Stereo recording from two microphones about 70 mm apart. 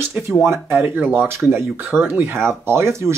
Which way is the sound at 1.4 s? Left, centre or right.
Right.